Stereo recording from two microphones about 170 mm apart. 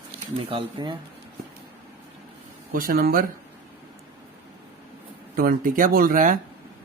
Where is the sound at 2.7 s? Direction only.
55° right (ahead or behind).